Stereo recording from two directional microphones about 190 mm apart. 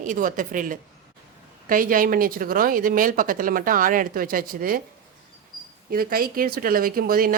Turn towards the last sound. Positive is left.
turn(degrees=-50)  # may be behind; listen again after turning